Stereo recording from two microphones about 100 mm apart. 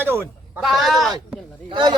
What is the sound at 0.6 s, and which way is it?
Speech, centre (ahead or behind).